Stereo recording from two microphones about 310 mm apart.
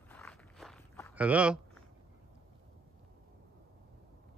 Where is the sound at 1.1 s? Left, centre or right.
Centre.